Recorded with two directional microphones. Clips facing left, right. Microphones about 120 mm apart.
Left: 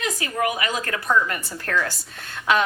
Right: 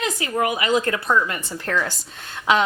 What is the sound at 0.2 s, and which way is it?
Speech, 25° right (ahead or behind).